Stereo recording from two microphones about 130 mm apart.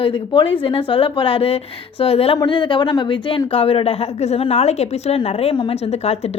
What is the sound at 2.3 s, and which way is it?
A woman's voice, 35° left (ahead or behind).